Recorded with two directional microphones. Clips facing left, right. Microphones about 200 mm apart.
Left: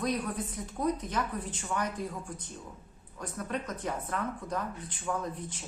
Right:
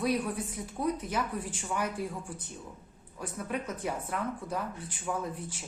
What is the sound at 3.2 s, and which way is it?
Speech, 10° right (ahead or behind).